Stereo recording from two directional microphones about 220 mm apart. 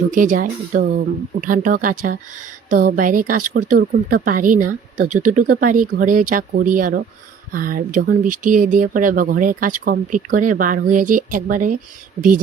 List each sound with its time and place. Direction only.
0.1 s a woman's voice: 35° right (ahead or behind)